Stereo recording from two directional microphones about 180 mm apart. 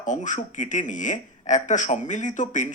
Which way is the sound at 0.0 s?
45° left (ahead or behind).